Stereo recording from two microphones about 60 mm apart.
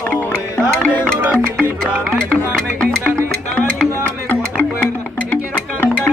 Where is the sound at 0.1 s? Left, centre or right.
Left.